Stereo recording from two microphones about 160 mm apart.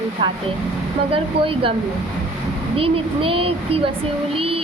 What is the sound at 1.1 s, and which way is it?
Speech, 35° right (ahead or behind).